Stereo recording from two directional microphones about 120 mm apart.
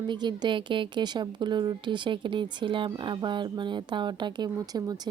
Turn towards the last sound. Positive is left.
turn(degrees=-35)  # may be behind; listen again after turning